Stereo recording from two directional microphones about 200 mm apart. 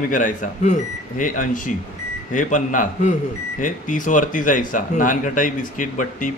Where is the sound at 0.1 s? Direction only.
40° left (ahead or behind).